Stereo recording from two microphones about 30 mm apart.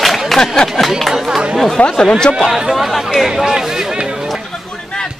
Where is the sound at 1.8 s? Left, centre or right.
Left.